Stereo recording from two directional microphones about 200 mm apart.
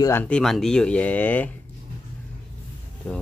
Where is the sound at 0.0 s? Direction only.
10° left (ahead or behind).